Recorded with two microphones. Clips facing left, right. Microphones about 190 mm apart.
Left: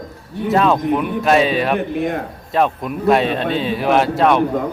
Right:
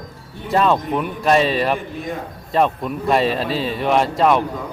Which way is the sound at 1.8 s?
65° left (ahead or behind).